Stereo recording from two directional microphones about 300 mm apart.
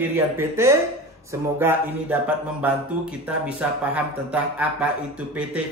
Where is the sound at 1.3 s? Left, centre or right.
Centre.